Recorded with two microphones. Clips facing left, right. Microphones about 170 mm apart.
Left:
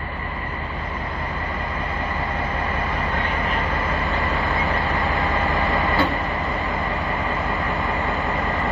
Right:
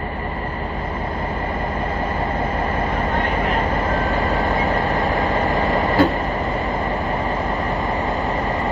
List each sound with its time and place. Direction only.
4.3 s vehicle: 40° right (ahead or behind)
4.9 s vehicle: 20° right (ahead or behind)
5.5 s train: 20° right (ahead or behind)